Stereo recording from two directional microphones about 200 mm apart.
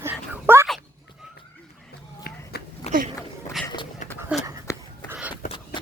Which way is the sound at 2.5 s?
55° left (ahead or behind).